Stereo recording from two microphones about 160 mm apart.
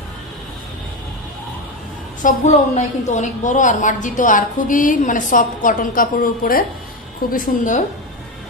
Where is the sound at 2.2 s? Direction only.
45° left (ahead or behind).